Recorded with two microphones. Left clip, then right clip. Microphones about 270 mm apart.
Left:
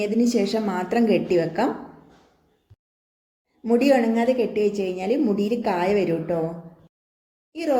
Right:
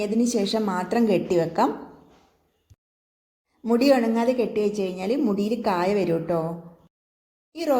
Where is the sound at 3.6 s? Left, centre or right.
Right.